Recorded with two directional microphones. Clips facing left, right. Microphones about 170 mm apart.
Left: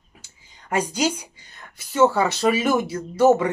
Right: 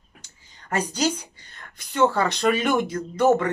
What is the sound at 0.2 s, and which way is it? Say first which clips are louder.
Speech: left 1 dB; 10° left (ahead or behind).